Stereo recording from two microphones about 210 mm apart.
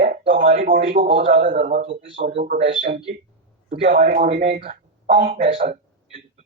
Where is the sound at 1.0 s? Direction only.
25° right (ahead or behind).